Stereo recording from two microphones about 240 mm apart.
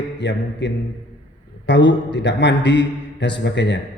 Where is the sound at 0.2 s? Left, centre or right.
Left.